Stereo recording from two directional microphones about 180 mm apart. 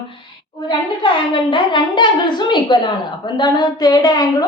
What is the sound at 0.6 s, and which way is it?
A woman's voice, 30° left (ahead or behind).